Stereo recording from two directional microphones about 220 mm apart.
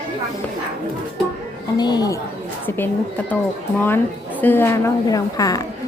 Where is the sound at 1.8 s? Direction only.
20° left (ahead or behind).